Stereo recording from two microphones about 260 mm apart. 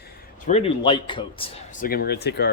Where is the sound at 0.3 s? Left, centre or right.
Left.